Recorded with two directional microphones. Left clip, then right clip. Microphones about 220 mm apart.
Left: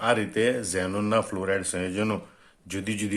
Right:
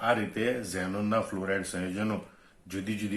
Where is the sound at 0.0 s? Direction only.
45° left (ahead or behind).